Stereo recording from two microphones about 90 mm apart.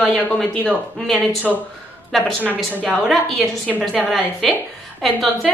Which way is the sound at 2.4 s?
20° right (ahead or behind).